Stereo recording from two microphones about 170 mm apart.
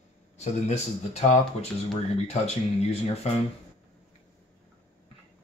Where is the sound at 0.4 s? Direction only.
40° left (ahead or behind).